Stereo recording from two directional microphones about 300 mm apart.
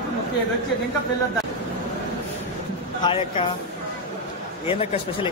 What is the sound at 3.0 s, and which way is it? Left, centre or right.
Speech, centre.